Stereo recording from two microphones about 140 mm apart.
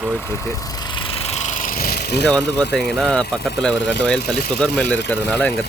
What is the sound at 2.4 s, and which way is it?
Speech, 5° left (ahead or behind).